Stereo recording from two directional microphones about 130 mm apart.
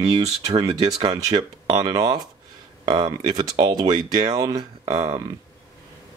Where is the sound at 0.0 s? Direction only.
45° right (ahead or behind).